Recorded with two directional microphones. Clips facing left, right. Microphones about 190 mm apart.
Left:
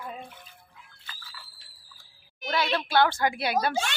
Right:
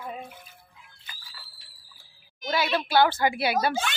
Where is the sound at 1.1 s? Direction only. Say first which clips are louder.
Left 1 dB; 15° right (ahead or behind).